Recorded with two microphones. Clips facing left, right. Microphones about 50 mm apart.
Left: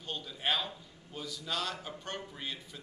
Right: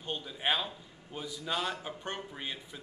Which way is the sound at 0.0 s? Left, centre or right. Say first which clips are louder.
Right 2 dB; centre.